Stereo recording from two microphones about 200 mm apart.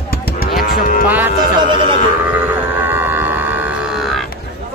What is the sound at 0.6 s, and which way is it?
Moo, 45° left (ahead or behind).